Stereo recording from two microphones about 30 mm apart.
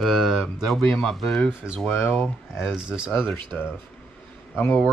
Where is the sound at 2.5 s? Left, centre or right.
Centre.